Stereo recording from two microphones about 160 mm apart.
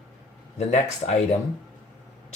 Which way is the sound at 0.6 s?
45° left (ahead or behind).